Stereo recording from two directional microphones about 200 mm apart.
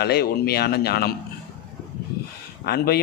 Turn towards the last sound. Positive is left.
turn(degrees=50)  # may be behind; listen again after turning